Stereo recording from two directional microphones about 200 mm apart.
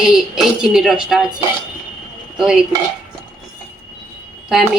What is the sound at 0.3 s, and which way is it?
Speech, centre (ahead or behind).